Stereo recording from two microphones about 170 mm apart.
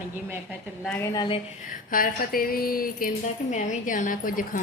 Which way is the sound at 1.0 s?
15° left (ahead or behind).